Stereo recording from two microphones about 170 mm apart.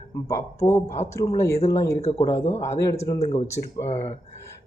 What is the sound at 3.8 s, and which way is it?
Speech, 40° left (ahead or behind).